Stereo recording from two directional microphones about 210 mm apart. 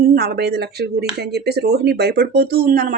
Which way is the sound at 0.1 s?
50° right (ahead or behind).